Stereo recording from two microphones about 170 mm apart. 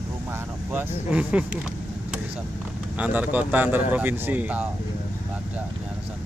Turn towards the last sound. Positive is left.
turn(degrees=-10)  # may be behind; listen again after turning